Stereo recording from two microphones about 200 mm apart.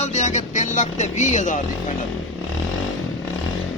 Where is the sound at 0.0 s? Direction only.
35° left (ahead or behind).